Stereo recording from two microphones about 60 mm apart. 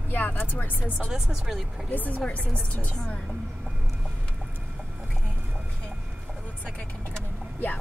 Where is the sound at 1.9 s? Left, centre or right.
Left.